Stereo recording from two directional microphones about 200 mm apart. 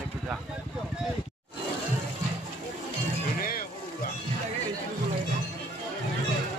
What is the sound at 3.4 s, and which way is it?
Boat, 45° left (ahead or behind).